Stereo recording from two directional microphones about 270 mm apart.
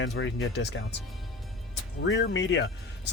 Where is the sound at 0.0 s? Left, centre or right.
Left.